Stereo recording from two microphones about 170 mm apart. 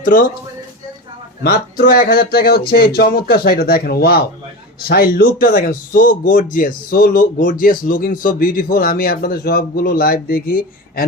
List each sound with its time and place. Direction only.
0.0 s speech: 50° left (ahead or behind)
1.5 s a man's voice: 65° left (ahead or behind)